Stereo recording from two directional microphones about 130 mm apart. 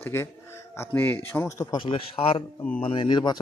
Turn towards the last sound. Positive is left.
turn(degrees=35)  # may be behind; listen again after turning